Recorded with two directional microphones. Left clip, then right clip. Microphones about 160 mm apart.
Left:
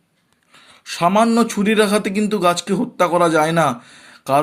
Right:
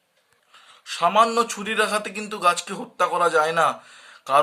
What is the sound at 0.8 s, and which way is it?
Speech, 30° left (ahead or behind).